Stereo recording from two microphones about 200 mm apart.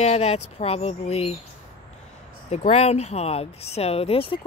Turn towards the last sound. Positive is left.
turn(degrees=30)  # may be behind; listen again after turning